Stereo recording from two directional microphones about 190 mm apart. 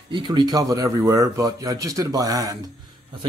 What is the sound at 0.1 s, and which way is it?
Speech, 20° right (ahead or behind).